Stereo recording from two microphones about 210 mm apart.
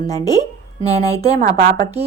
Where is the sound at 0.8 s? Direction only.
30° right (ahead or behind).